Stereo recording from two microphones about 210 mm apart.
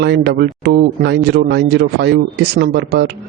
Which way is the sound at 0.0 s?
55° right (ahead or behind).